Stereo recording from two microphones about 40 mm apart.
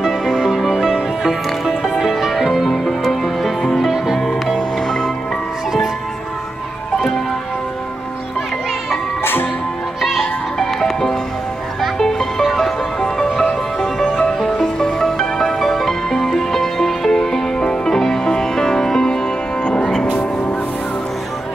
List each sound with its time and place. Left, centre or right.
0.0 s music: centre
9.2 s music: left
10.0 s music: centre